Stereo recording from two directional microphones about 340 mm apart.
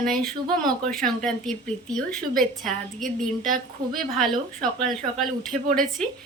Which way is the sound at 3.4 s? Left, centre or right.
Right.